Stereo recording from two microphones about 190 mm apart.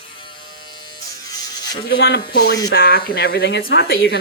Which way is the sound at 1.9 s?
65° left (ahead or behind).